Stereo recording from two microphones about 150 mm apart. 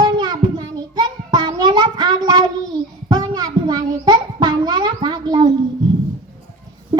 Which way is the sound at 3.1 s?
25° right (ahead or behind).